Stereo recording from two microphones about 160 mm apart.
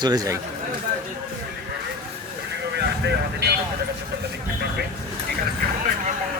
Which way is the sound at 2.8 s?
85° right.